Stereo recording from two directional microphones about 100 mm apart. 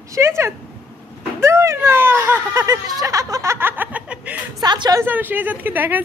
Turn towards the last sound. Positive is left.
turn(degrees=-20)  # may be behind; listen again after turning